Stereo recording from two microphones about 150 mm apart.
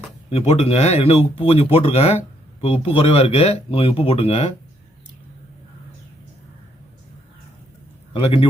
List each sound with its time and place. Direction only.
0.3 s speech: 45° left (ahead or behind)
8.1 s speech: 35° left (ahead or behind)